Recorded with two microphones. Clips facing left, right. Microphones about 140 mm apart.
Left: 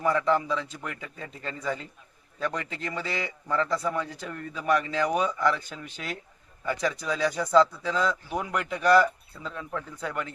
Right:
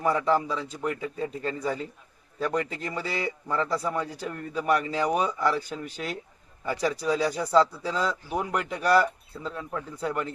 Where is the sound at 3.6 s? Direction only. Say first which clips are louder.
Even; 10° right (ahead or behind).